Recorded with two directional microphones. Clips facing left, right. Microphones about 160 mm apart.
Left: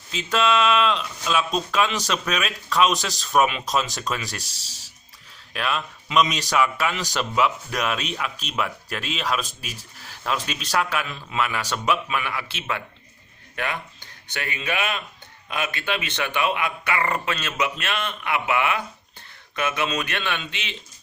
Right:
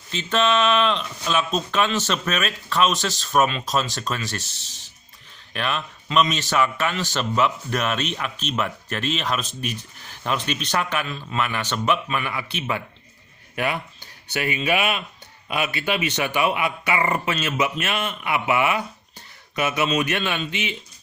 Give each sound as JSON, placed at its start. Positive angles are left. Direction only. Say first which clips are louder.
{"t": 0.3, "sound": "a man's voice", "louder": "right 1 dB", "side_deg": 10}
{"t": 1.7, "sound": "a man's voice", "louder": "right 1 dB", "side_deg": 10}
{"t": 5.5, "sound": "a man's voice", "louder": "even", "side_deg": 5}
{"t": 14.4, "sound": "speech", "louder": "right 5 dB", "side_deg": -15}